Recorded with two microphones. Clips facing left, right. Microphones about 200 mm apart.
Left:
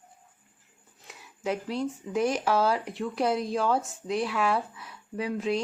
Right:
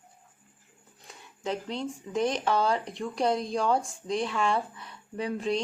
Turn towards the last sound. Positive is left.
turn(degrees=5)  # may be behind; listen again after turning